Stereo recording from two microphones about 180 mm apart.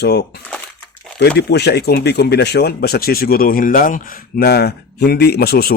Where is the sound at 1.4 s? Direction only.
65° left (ahead or behind).